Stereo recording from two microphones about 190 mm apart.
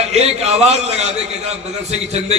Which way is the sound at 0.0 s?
35° right (ahead or behind).